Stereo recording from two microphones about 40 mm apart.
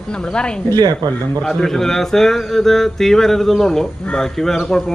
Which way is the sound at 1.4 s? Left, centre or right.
Centre.